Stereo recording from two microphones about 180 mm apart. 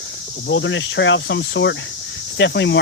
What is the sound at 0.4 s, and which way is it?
Speech, 90° left.